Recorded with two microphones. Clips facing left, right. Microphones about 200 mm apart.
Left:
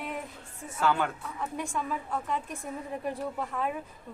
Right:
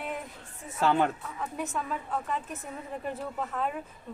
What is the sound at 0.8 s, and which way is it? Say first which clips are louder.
Speech: right 2 dB; 30° right (ahead or behind).